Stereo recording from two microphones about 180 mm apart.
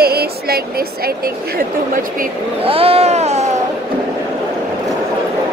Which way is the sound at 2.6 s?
30° right (ahead or behind).